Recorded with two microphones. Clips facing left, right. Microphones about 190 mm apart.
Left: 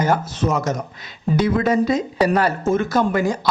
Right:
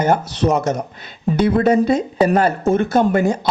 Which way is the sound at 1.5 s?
30° right (ahead or behind).